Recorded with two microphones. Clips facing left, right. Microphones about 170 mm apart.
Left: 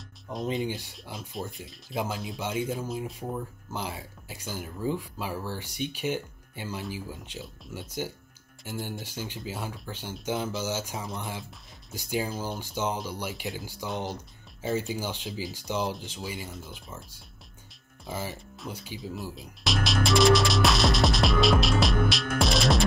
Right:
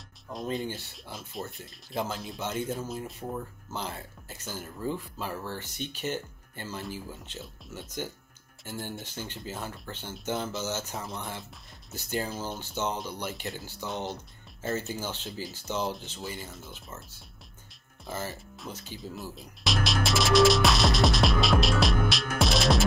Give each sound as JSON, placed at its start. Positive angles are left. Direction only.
{"t": 0.3, "sound": "speech", "side_deg": 20}
{"t": 1.4, "sound": "speech", "side_deg": 5}
{"t": 15.2, "sound": "speech", "side_deg": 0}
{"t": 16.7, "sound": "speech", "side_deg": 10}
{"t": 18.0, "sound": "speech", "side_deg": 0}
{"t": 18.7, "sound": "speech", "side_deg": 10}
{"t": 19.3, "sound": "speech", "side_deg": 0}